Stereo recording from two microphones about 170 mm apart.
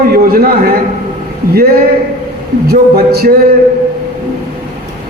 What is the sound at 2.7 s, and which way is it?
Speech, 65° right (ahead or behind).